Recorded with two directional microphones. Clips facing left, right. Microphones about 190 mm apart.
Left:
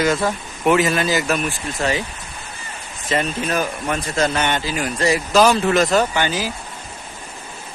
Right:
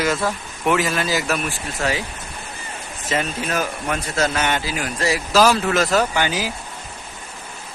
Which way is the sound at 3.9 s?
10° left (ahead or behind).